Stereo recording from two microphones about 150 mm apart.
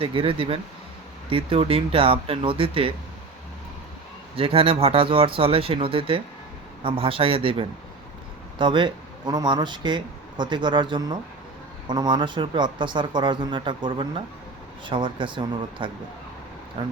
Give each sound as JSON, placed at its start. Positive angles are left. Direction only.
{"t": 0.0, "sound": "speech", "side_deg": -35}
{"t": 4.4, "sound": "speech", "side_deg": -40}